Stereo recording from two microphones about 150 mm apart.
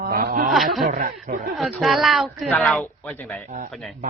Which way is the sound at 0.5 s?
Centre (ahead or behind).